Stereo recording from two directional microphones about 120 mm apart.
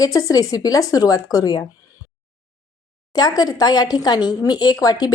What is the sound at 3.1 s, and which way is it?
Speech, 35° left (ahead or behind).